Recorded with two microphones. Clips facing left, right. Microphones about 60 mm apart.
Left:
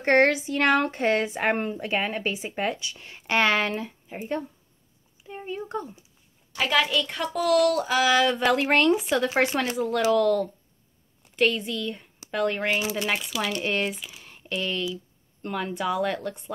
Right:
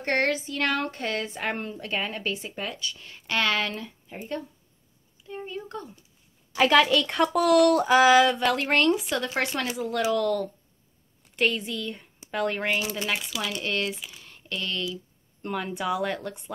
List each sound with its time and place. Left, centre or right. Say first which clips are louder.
0.0 s speech: left 5 dB; left
1.8 s speech: left 4 dB; centre
2.5 s speech: left 5 dB; left
6.5 s a woman's voice: right 4 dB; right
7.1 s speech: right 3 dB; right
7.7 s a sound: right 4 dB; right
8.1 s speech: right 3 dB; centre
8.4 s speech: left 2 dB; centre
12.7 s speech: left 2 dB; centre
15.4 s speech: left 1 dB; centre